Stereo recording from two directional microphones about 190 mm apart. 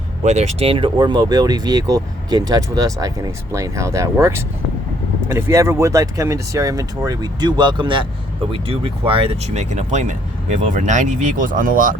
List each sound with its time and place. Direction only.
0.3 s speech: 35° right (ahead or behind)